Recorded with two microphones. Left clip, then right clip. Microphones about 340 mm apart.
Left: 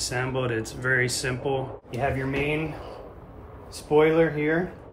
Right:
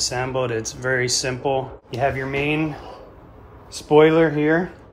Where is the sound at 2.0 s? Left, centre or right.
Right.